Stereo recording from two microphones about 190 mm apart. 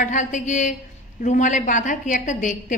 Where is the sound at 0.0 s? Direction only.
40° left (ahead or behind).